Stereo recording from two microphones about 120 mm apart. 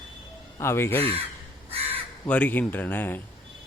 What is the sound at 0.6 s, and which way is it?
Speech, 20° left (ahead or behind).